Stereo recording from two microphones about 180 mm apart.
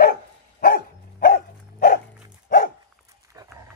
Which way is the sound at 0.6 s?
55° left (ahead or behind).